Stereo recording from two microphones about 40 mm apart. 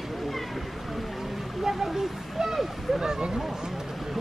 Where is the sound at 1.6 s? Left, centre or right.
Centre.